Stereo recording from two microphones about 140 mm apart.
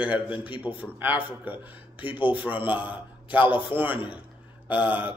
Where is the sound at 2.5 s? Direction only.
40° left (ahead or behind).